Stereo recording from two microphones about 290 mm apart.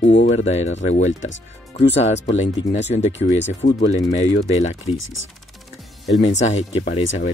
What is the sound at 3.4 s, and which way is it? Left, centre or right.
Speech, left.